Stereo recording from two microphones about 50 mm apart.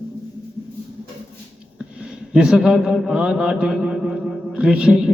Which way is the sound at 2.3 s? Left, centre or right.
Centre.